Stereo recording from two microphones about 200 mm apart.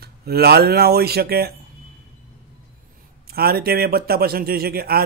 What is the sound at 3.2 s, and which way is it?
Speech, 50° right (ahead or behind).